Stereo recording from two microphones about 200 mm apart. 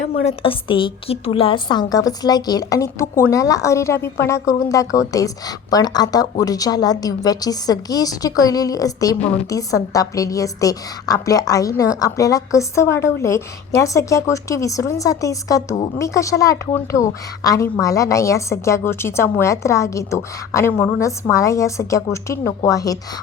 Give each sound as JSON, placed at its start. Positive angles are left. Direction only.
{"t": 0.0, "sound": "a woman's voice", "side_deg": 30}